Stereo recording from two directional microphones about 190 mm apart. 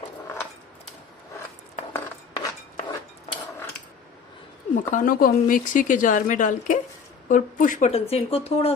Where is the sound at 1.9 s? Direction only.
15° left (ahead or behind).